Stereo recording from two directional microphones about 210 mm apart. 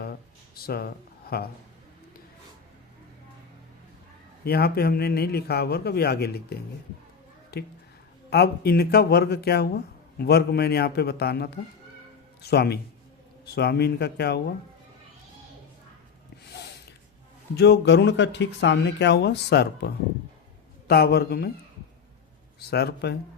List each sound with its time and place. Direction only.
0.0 s a sound: 45° left (ahead or behind)
4.4 s speech: 50° left (ahead or behind)
17.5 s speech: 50° left (ahead or behind)
22.7 s speech: 50° left (ahead or behind)